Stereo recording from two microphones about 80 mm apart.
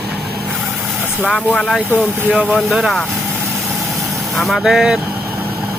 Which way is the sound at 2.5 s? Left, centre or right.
Centre.